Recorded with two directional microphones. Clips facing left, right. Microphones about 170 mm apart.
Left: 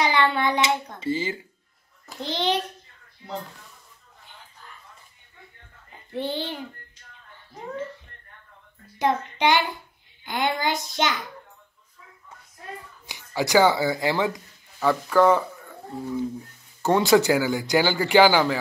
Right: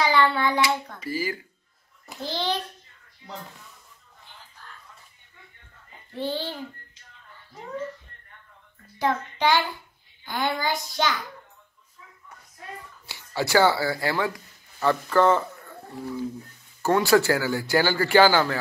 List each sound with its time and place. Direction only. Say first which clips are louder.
0.0 s hands: even; 20° left (ahead or behind)
2.2 s a child's voice: left 3 dB; 20° left (ahead or behind)
6.1 s speech: left 1 dB; 15° left (ahead or behind)
8.9 s a child's voice: left 2 dB; 20° left (ahead or behind)
13.0 s speech: left 1 dB; 15° left (ahead or behind)
16.8 s speech: left 1 dB; 20° left (ahead or behind)